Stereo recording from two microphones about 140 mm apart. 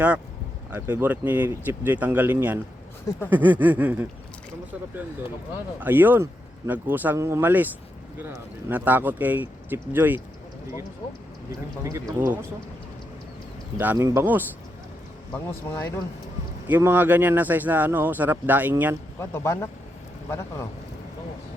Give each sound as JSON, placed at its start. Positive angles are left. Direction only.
{"t": 0.7, "sound": "speech", "side_deg": -15}
{"t": 5.8, "sound": "speech", "side_deg": -15}
{"t": 8.7, "sound": "speech", "side_deg": -10}
{"t": 11.8, "sound": "speech", "side_deg": -20}
{"t": 13.7, "sound": "speech", "side_deg": -15}
{"t": 15.3, "sound": "speech", "side_deg": 10}
{"t": 16.6, "sound": "speech", "side_deg": -15}
{"t": 19.2, "sound": "speech", "side_deg": 20}